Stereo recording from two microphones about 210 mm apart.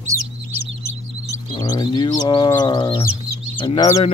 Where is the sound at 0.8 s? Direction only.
15° left (ahead or behind).